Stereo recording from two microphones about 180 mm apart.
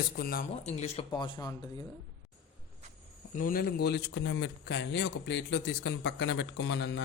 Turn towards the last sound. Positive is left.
turn(degrees=75)  # may be behind; listen again after turning